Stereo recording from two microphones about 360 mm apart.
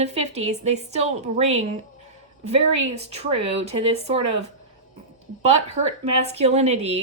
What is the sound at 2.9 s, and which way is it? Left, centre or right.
A woman's voice, centre.